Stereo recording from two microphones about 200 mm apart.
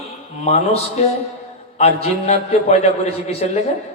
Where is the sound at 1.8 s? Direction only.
30° left (ahead or behind).